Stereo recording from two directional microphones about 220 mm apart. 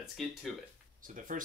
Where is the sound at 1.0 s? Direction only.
35° right (ahead or behind).